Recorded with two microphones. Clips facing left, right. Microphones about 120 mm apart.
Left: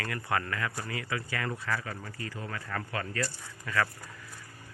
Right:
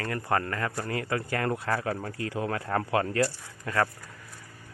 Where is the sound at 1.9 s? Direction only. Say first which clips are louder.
Right 8 dB; 65° right (ahead or behind).